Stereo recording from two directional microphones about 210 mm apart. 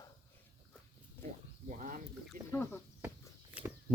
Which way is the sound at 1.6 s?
35° right (ahead or behind).